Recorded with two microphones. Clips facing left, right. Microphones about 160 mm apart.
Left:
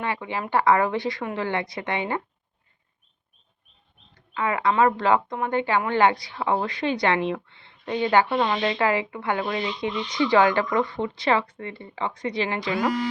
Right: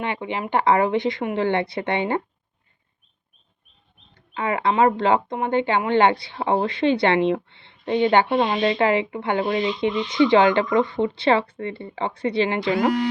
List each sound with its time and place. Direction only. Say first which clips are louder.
0.0 s speech: right 2 dB; 20° right (ahead or behind)
4.1 s speech: right 1 dB; 25° right (ahead or behind)